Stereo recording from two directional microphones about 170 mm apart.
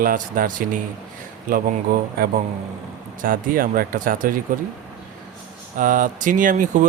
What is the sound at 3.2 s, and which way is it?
Speech, 55° right (ahead or behind).